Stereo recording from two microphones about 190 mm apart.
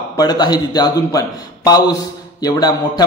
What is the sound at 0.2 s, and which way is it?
A man's voice, 20° left (ahead or behind).